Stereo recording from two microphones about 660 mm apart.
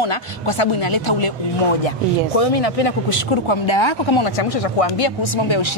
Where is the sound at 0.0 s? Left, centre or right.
Left.